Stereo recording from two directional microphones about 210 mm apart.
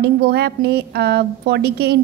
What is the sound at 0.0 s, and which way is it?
A woman's voice, 50° right (ahead or behind).